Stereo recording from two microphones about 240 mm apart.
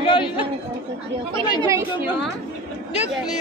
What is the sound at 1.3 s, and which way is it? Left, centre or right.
Speech, centre.